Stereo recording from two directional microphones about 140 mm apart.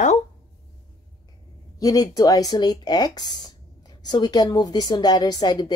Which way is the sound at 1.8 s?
25° left (ahead or behind).